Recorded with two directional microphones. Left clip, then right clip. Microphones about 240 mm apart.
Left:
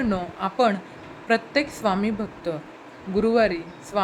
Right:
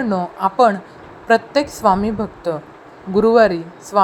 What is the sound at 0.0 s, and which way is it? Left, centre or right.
Speech, centre.